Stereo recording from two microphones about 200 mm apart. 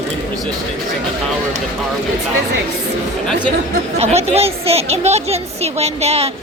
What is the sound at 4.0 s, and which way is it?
A woman's voice, 30° right (ahead or behind).